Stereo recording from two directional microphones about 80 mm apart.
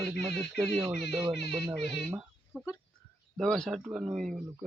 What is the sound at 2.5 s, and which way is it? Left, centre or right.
Speech, centre.